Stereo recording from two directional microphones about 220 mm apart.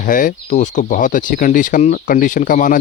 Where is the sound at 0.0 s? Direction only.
40° left (ahead or behind).